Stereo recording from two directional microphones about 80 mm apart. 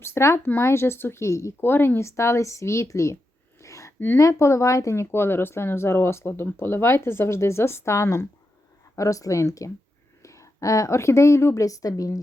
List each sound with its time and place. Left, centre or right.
0.0 s speech: left
3.6 s a sound: left
4.2 s speech: left